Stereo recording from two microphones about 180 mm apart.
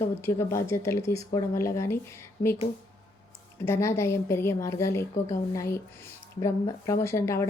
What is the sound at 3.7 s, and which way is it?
A woman's voice, 15° left (ahead or behind).